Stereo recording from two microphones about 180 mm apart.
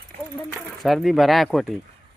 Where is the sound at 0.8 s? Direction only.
Centre (ahead or behind).